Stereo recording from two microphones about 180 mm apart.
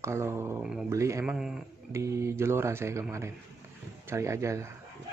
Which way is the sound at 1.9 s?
15° right (ahead or behind).